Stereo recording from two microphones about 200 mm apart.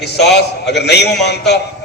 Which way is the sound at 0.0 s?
55° left (ahead or behind).